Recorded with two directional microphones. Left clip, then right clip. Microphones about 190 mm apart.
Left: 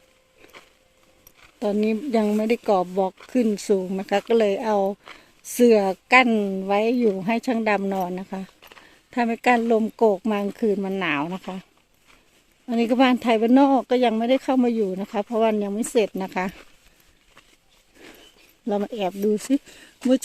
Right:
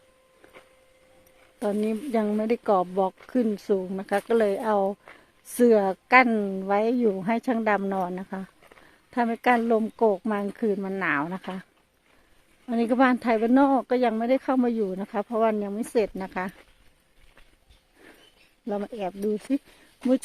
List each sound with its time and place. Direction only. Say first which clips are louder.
1.5 s speech: left 4 dB; 10° left (ahead or behind)
12.6 s speech: left 2 dB; 10° left (ahead or behind)
18.6 s speech: left 5 dB; 20° left (ahead or behind)